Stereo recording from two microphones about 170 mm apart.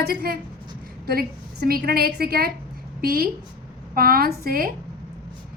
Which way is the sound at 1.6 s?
60° right (ahead or behind).